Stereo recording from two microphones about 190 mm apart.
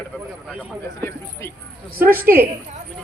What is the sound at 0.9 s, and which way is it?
Speech, 10° left (ahead or behind).